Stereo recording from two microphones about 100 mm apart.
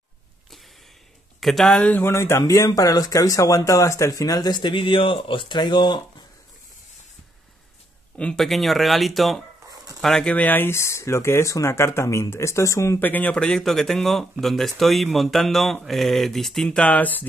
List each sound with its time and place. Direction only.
1.4 s speech: centre (ahead or behind)
1.9 s speech: 20° left (ahead or behind); by 5.9 s 50° left (ahead or behind)
8.2 s speech: 5° left (ahead or behind); by 13.0 s 30° left (ahead or behind)
13.0 s speech: 15° left (ahead or behind)